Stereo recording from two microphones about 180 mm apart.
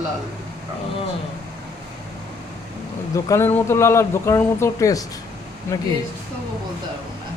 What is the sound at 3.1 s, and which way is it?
Speech, 15° left (ahead or behind).